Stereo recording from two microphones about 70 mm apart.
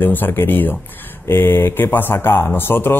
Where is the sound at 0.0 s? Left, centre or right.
Left.